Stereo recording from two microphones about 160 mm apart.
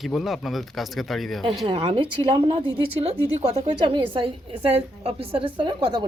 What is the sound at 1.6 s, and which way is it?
A woman's voice, 35° right (ahead or behind).